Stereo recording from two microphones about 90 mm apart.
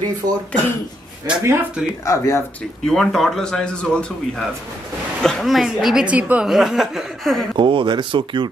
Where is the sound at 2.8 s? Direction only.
5° left (ahead or behind); by 6.5 s 15° right (ahead or behind).